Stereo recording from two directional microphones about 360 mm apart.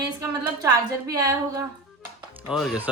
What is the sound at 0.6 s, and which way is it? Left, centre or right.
A woman's voice, centre.